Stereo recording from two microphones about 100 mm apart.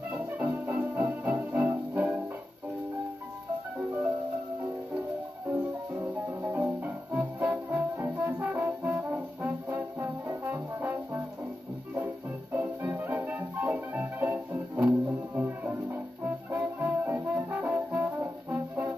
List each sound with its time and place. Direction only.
0.1 s music: 15° right (ahead or behind)
5.9 s music: 20° right (ahead or behind)
6.8 s brass instrument: 15° right (ahead or behind)
9.8 s trombone: 20° right (ahead or behind)
12.5 s music: 20° right (ahead or behind)